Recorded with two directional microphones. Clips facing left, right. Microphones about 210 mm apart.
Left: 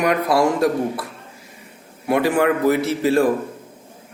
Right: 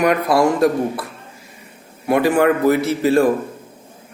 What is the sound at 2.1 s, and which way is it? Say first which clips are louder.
A man's voice: right 3 dB; 50° right (ahead or behind).